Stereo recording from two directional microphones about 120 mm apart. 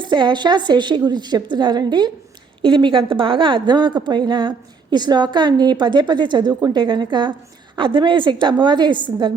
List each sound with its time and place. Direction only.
0.0 s a woman's voice: 40° right (ahead or behind)